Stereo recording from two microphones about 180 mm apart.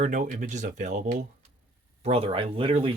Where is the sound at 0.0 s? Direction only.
45° right (ahead or behind).